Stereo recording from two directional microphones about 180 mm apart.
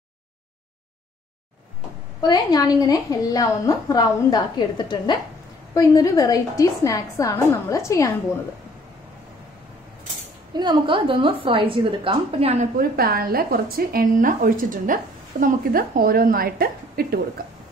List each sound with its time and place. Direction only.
2.2 s a woman's voice: 20° left (ahead or behind)
10.5 s a woman's voice: 25° right (ahead or behind)
12.7 s a woman's voice: 60° right (ahead or behind)